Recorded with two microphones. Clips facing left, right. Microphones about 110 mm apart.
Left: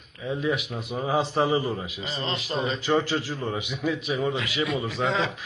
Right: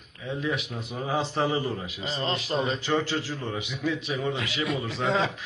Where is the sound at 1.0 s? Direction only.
15° left (ahead or behind).